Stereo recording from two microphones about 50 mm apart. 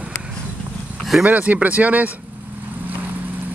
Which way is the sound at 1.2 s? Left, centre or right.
Right.